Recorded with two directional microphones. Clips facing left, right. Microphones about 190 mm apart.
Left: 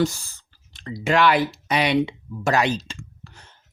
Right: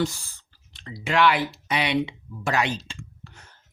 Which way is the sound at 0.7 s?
40° left (ahead or behind).